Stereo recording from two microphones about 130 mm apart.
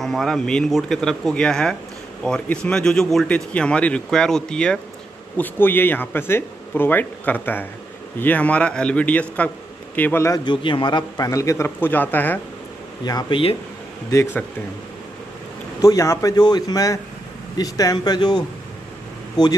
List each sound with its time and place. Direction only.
0.0 s speech: centre (ahead or behind); by 10.4 s 20° left (ahead or behind)
10.4 s a man's voice: 40° left (ahead or behind); by 12.4 s 15° left (ahead or behind)
13.0 s speech: 30° left (ahead or behind)
15.8 s a man's voice: 25° left (ahead or behind)